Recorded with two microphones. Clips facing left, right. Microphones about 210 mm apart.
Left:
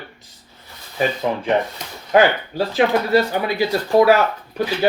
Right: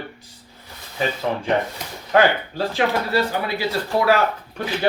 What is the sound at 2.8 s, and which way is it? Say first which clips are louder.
Speech: left 4 dB; 35° left (ahead or behind).